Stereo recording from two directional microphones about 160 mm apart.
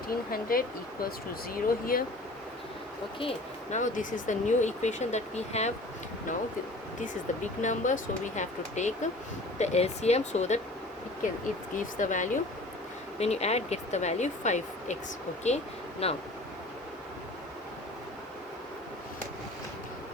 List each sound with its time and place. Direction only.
0.1 s speech: 65° left (ahead or behind)
1.6 s speech: 65° left (ahead or behind)
3.2 s speech: 35° left (ahead or behind)
3.8 s speech: 50° left (ahead or behind)
7.6 s speech: 50° left (ahead or behind)
11.8 s speech: 55° left (ahead or behind)
13.1 s speech: 40° left (ahead or behind)